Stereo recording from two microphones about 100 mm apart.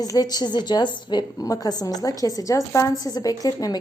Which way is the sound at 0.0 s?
40° left (ahead or behind).